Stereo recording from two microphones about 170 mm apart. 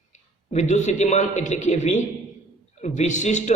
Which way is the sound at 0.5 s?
45° left (ahead or behind).